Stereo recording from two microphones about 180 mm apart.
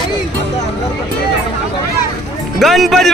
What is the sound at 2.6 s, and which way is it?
Speech, centre (ahead or behind).